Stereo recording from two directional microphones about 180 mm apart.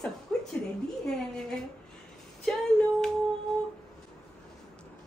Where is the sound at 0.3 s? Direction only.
5° left (ahead or behind).